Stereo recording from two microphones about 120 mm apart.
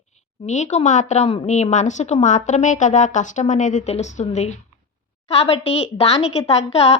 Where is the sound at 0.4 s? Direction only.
75° left (ahead or behind).